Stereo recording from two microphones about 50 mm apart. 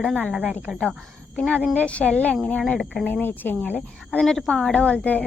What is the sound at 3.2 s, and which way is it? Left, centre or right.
Speech, left.